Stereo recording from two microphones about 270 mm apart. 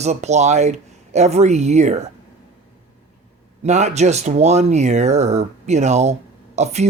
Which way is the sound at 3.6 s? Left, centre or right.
Right.